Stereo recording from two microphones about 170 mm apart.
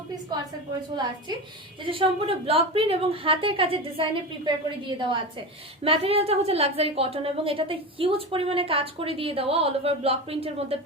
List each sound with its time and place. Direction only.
1.8 s a woman's voice: 30° right (ahead or behind)